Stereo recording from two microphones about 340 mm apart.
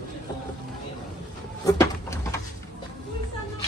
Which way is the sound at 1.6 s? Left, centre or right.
Centre.